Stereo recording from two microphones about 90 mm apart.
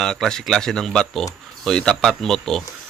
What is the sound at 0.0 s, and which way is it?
Speech, 5° left (ahead or behind).